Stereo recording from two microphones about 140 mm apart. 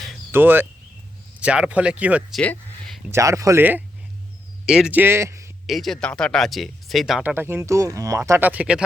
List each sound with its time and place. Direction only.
0.3 s speech: 15° right (ahead or behind)
2.3 s a sound: 5° left (ahead or behind)
3.1 s speech: 20° right (ahead or behind)
5.6 s speech: centre (ahead or behind); by 8.2 s 25° right (ahead or behind)
8.2 s speech: 15° right (ahead or behind)